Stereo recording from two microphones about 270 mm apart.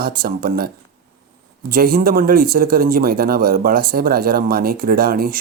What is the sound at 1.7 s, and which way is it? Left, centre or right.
Speech, right.